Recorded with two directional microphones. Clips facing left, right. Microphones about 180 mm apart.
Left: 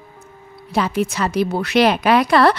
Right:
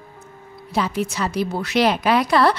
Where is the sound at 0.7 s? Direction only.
60° left (ahead or behind).